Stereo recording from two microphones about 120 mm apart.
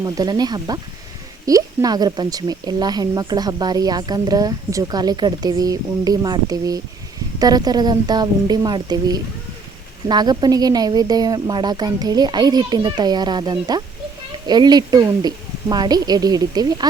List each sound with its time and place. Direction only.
0.0 s speech: 35° right (ahead or behind)